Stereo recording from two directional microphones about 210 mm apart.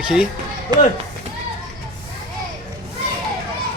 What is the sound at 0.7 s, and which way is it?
Speech, 20° right (ahead or behind).